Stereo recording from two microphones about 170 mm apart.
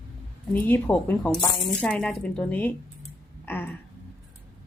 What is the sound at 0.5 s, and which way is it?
Speech, 10° left (ahead or behind).